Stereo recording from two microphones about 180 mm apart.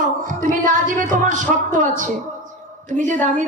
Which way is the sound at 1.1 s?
45° right (ahead or behind).